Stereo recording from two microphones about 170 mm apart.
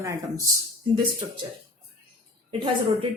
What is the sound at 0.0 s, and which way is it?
Speech, 20° right (ahead or behind).